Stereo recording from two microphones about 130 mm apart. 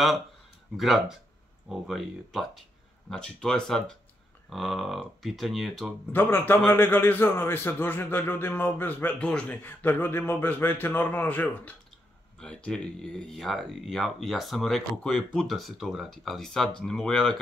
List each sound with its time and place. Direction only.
0.7 s speech: centre (ahead or behind)
6.1 s a man's voice: 15° left (ahead or behind)